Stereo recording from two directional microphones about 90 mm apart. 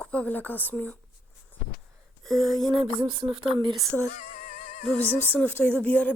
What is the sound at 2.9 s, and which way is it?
Speech, 85° right.